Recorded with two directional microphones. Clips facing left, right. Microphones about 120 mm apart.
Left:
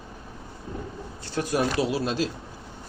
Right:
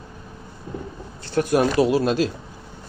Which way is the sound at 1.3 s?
60° right (ahead or behind).